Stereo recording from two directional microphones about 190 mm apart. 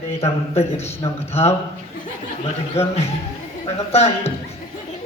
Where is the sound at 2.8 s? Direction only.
35° left (ahead or behind).